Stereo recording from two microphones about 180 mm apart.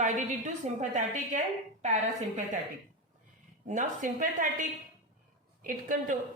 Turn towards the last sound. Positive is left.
turn(degrees=-50)  # may be behind; listen again after turning